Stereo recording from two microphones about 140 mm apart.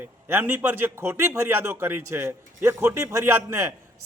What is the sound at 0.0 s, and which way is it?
A man's voice, 15° right (ahead or behind).